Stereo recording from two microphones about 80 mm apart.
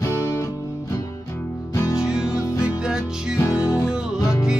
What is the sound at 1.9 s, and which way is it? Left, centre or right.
Music, centre.